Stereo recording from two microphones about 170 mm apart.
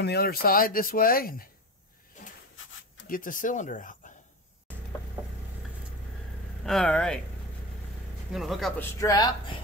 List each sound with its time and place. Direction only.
0.0 s speech: 70° left (ahead or behind)
2.2 s a sound: 50° left (ahead or behind)
3.1 s speech: 55° left (ahead or behind)
6.6 s speech: 5° left (ahead or behind)
8.3 s speech: centre (ahead or behind)
9.0 s speech: 20° left (ahead or behind)